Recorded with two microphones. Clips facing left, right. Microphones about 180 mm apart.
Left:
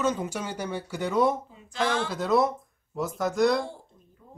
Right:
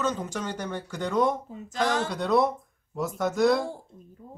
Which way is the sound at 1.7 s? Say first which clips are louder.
Right 1 dB; 45° right (ahead or behind).